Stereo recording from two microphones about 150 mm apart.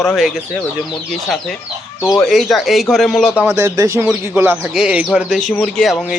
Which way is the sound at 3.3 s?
15° right (ahead or behind).